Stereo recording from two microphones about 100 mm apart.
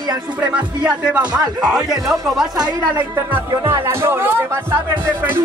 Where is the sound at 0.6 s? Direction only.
10° right (ahead or behind).